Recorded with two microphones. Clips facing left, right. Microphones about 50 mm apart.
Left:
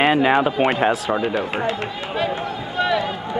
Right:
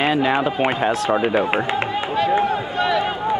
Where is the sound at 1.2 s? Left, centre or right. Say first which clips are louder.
Right 3 dB; right.